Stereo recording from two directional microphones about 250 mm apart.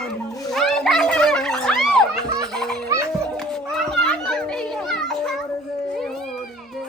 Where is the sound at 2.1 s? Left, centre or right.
Centre.